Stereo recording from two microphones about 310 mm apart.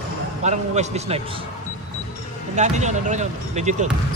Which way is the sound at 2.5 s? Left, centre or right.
Right.